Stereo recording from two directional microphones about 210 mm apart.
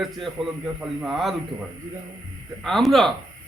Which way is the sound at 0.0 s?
Centre (ahead or behind).